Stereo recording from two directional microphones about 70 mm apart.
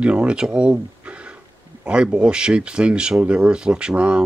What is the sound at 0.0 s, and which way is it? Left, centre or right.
Speech, centre.